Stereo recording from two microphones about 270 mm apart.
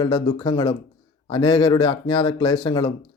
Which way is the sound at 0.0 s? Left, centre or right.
Centre.